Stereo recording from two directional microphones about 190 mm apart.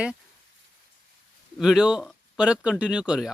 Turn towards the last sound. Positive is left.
turn(degrees=-5)  # may be behind; listen again after turning